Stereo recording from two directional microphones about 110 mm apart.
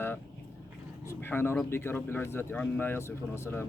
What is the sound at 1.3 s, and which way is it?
Speech, 20° left (ahead or behind).